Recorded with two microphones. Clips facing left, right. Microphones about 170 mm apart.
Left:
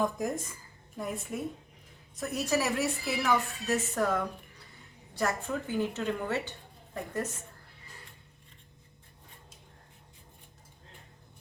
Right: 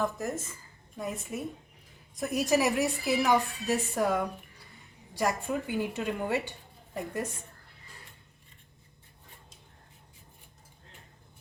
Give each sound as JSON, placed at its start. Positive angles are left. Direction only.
{"t": 0.9, "sound": "a woman's voice", "side_deg": 0}
{"t": 2.1, "sound": "a woman's voice", "side_deg": -15}